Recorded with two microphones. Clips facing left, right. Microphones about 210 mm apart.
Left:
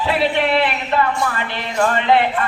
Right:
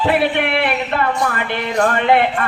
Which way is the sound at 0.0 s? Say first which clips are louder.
Right 2 dB; 55° right (ahead or behind).